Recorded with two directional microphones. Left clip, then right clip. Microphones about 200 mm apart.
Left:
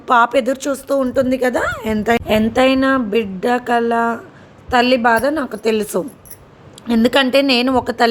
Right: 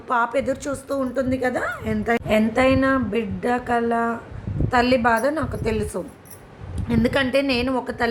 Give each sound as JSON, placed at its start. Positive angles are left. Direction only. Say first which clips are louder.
{"t": 0.1, "sound": "a woman's voice", "louder": "left 8 dB", "side_deg": 45}